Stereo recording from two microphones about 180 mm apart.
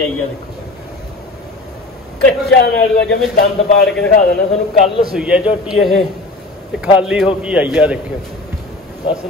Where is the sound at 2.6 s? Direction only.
65° left (ahead or behind).